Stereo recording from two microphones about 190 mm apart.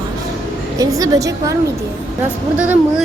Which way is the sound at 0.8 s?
20° right (ahead or behind).